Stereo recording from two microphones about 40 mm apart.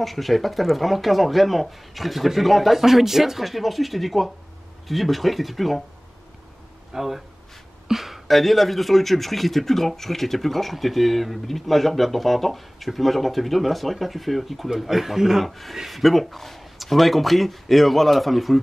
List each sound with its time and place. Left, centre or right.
0.0 s speech: centre
6.9 s speech: centre
7.9 s a sound: centre
8.3 s speech: centre